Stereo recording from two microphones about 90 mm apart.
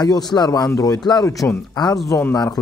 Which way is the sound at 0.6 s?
40° left (ahead or behind).